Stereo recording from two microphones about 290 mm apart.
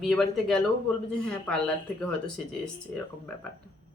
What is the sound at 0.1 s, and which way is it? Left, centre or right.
Speech, centre.